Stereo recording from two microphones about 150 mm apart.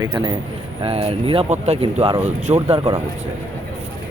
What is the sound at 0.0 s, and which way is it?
Speech, 30° right (ahead or behind).